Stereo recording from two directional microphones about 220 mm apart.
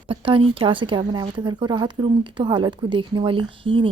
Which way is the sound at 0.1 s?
25° right (ahead or behind).